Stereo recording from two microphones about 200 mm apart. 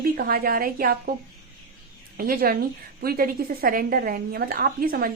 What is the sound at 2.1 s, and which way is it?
A woman's voice, 45° right (ahead or behind).